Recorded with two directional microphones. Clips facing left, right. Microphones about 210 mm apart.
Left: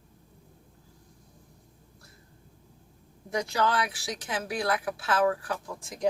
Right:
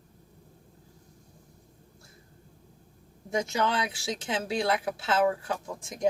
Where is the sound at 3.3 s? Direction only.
25° right (ahead or behind).